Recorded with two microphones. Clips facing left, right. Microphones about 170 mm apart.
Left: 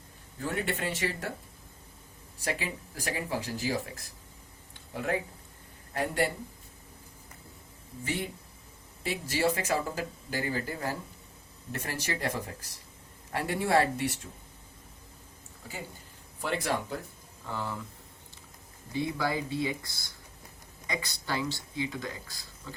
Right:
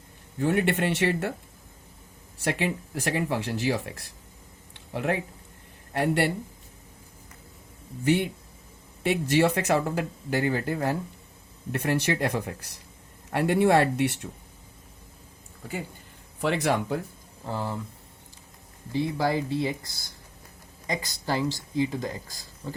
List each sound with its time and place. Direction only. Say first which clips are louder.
0.3 s speech: right 9 dB; 75° right (ahead or behind)
2.4 s speech: right 7 dB; 70° right (ahead or behind)
5.9 s speech: right 5 dB; 75° right (ahead or behind)
8.0 s speech: right 10 dB; 70° right (ahead or behind)
16.4 s speech: right 6 dB; 70° right (ahead or behind)
17.4 s speech: right 4 dB; 30° right (ahead or behind)
19.1 s speech: right 5 dB; 40° right (ahead or behind)